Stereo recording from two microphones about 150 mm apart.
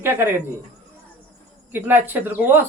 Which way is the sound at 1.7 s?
15° right (ahead or behind).